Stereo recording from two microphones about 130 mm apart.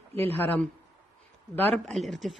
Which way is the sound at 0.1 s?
15° left (ahead or behind).